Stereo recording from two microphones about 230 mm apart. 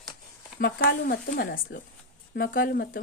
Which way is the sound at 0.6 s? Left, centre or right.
Left.